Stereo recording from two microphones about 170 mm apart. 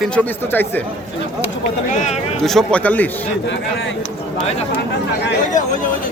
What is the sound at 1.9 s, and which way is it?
Speech, 45° left (ahead or behind).